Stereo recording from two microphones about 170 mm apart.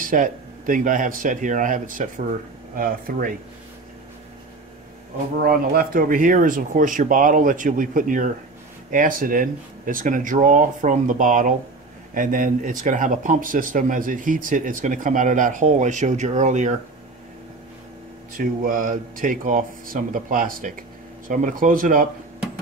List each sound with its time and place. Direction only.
0.0 s speech: 55° right (ahead or behind)
5.4 s speech: 60° right (ahead or behind); by 16.7 s 45° right (ahead or behind)
18.4 s speech: 55° right (ahead or behind)